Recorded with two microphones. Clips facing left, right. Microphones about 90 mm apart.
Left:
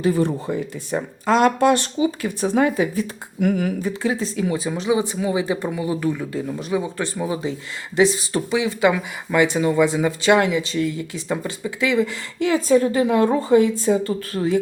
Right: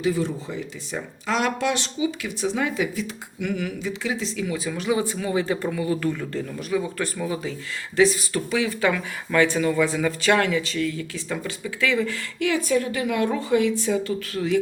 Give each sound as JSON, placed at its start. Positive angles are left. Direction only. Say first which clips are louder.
{"t": 0.0, "sound": "speech", "louder": "left 4 dB", "side_deg": 50}